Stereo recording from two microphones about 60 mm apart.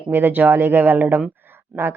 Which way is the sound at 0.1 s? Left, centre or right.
Right.